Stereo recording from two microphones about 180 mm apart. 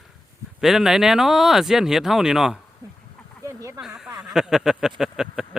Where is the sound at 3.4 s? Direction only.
15° right (ahead or behind).